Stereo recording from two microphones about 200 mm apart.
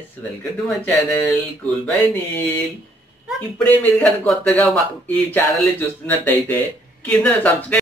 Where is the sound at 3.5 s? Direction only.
10° left (ahead or behind).